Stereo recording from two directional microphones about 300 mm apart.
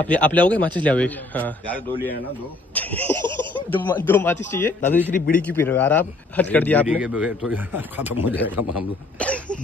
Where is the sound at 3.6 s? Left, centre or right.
Centre.